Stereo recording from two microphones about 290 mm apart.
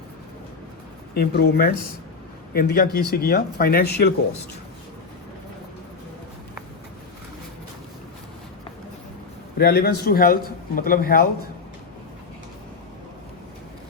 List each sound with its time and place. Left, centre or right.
1.1 s a man's voice: left
9.6 s a man's voice: left